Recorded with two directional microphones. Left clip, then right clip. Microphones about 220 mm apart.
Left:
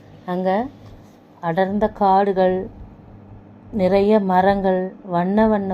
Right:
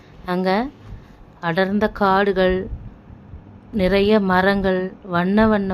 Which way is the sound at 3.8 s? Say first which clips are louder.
Left 1 dB; 15° right (ahead or behind).